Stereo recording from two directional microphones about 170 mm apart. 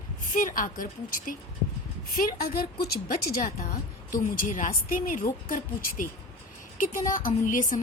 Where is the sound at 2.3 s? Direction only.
60° left (ahead or behind).